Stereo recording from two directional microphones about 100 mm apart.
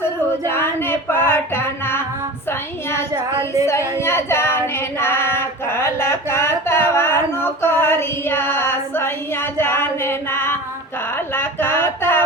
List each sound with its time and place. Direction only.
0.4 s music: 25° left (ahead or behind)
3.7 s female singing: 25° left (ahead or behind)
11.3 s a sound: 20° left (ahead or behind)